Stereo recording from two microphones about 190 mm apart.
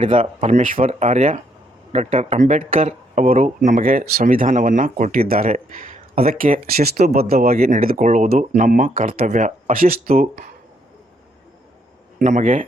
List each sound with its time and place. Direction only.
0.0 s speech: 30° right (ahead or behind); by 5.5 s 50° right (ahead or behind)
5.7 s speech: 35° right (ahead or behind)
12.2 s speech: 40° right (ahead or behind)